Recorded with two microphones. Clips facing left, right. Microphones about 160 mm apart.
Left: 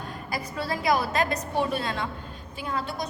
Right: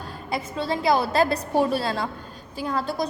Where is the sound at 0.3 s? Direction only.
25° right (ahead or behind).